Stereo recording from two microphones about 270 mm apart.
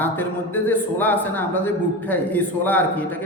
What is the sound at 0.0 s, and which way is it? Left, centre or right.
A man's voice, centre.